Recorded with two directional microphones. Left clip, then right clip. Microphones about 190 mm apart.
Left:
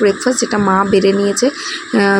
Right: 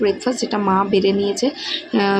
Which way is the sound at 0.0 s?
25° left (ahead or behind).